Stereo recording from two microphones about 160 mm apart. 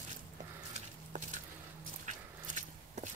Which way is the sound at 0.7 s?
50° right (ahead or behind).